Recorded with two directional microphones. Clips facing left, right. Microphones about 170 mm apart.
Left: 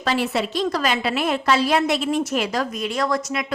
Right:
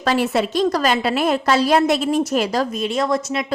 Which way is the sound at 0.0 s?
45° right (ahead or behind).